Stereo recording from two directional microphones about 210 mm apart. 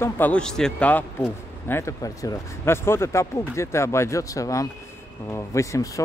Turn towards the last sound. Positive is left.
turn(degrees=15)  # may be behind; listen again after turning